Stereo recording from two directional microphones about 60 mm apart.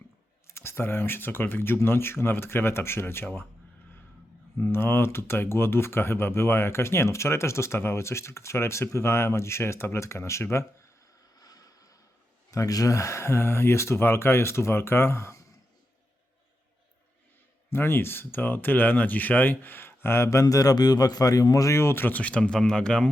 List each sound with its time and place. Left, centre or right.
0.4 s speech: left
4.6 s speech: left
11.3 s vehicle: left
12.5 s speech: left
17.7 s speech: left
21.8 s speech: left
22.0 s speech: left